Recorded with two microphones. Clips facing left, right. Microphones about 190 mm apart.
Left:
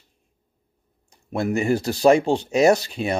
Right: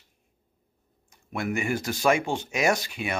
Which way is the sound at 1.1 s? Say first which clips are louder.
Left 6 dB; 35° left (ahead or behind).